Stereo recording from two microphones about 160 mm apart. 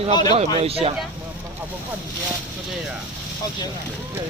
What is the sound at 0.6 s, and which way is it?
Speech, 40° right (ahead or behind).